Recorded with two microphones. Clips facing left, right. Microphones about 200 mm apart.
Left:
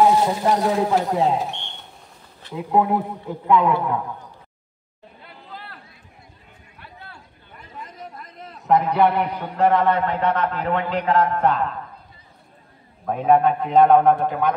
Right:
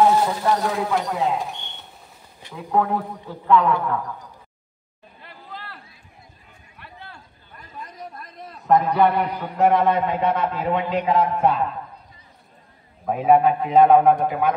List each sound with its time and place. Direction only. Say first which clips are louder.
0.2 s speech: left 2 dB; 20° left (ahead or behind)
1.4 s a sound: left 2 dB; centre (ahead or behind)
2.5 s a man's voice: left 2 dB; 15° left (ahead or behind)
8.6 s a man's voice: even; 5° left (ahead or behind)
9.6 s a man's voice: even; 10° right (ahead or behind)
13.0 s a man's voice: right 1 dB; 5° right (ahead or behind)